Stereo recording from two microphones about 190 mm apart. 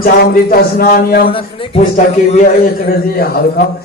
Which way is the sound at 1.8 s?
40° left (ahead or behind).